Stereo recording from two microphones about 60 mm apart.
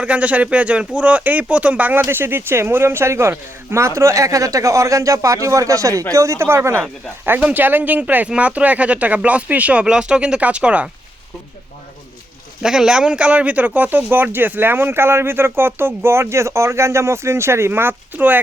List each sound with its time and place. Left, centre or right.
0.0 s speech: right
2.0 s speech: right
7.5 s speech: right
12.6 s speech: centre; by 18.3 s right